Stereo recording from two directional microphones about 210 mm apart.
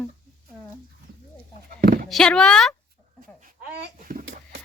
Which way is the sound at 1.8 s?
45° right (ahead or behind).